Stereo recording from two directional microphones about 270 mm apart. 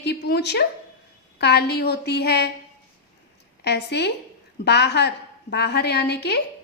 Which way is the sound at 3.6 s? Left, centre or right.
Left.